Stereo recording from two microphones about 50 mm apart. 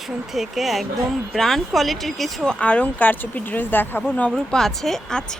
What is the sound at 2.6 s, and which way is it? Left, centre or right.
Speech, left.